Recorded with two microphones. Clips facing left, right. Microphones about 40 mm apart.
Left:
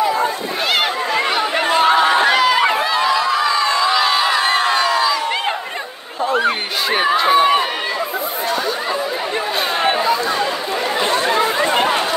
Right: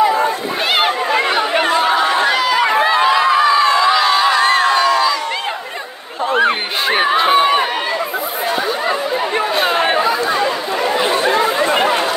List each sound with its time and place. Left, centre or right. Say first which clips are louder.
1.7 s chatter: left 4 dB; left
2.2 s run: left 1 dB; left
2.7 s crowd: right 4 dB; right; by 5.1 s centre
6.3 s a sound: right 3 dB; right
9.6 s chatter: right 2 dB; centre